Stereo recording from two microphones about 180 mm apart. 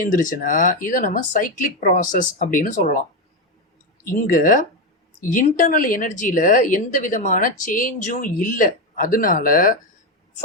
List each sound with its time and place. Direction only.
0.0 s speech: 45° left (ahead or behind)
4.0 s speech: 50° left (ahead or behind)